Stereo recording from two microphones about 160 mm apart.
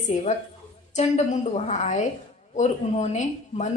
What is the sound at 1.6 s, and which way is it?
A woman's voice, 45° left (ahead or behind).